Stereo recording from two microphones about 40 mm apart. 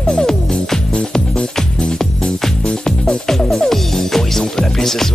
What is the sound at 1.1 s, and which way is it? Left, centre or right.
Music, centre.